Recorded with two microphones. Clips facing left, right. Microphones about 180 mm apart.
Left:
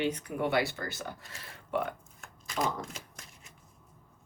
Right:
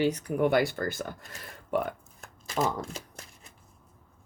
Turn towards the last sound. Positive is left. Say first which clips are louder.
# right 4 dB
turn(degrees=-35)  # may be behind; listen again after turning